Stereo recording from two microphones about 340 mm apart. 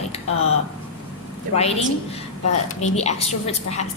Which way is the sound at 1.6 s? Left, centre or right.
Centre.